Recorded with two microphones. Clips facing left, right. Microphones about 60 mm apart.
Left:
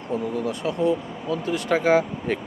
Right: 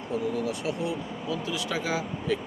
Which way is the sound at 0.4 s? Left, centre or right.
Left.